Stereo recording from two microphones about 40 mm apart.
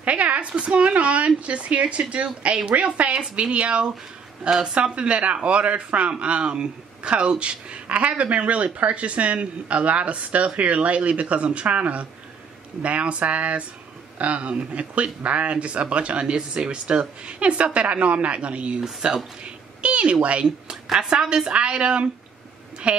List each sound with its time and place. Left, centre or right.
0.0 s a man's voice: right
18.8 s speech: centre
19.4 s meow: right
20.4 s a man's voice: centre